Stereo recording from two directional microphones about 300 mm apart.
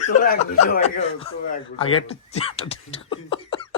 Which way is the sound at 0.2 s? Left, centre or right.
Left.